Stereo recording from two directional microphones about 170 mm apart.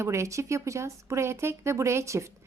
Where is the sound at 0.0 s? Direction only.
15° right (ahead or behind).